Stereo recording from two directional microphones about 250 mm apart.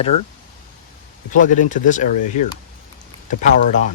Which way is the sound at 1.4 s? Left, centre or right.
Left.